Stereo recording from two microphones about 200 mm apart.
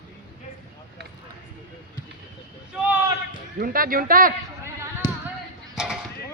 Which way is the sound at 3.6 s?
45° right (ahead or behind).